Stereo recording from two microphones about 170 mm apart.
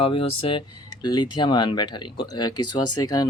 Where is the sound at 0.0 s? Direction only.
35° left (ahead or behind).